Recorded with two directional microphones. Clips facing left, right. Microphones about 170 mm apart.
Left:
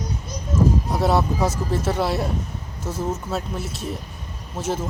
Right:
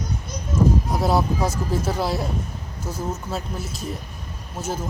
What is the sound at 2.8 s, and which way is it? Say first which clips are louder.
Speech: left 3 dB; 25° left (ahead or behind).